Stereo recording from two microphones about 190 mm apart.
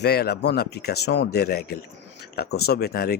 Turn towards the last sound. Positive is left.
turn(degrees=55)  # may be behind; listen again after turning